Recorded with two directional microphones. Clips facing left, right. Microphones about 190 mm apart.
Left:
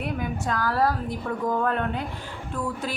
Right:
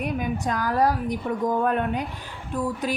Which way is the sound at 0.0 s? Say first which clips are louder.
Right 2 dB; 15° right (ahead or behind).